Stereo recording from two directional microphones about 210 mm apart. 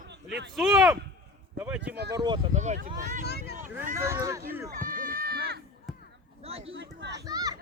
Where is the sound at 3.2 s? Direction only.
50° left (ahead or behind).